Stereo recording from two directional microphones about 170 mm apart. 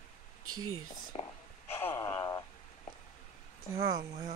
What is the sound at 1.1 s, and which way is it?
Whispering, 35° left (ahead or behind).